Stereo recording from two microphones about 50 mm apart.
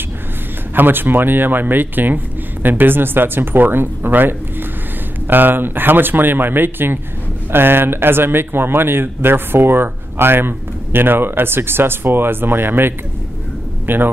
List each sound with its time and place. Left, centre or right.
0.7 s speech: right